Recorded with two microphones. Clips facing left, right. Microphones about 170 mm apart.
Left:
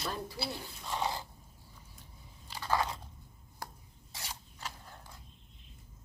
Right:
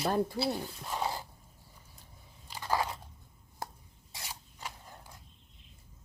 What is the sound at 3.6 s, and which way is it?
Stir, 20° right (ahead or behind).